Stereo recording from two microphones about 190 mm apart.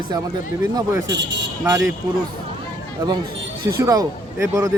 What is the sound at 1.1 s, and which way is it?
Speech, 70° right (ahead or behind).